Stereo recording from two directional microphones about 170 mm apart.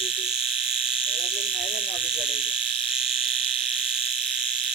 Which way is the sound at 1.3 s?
5° right (ahead or behind).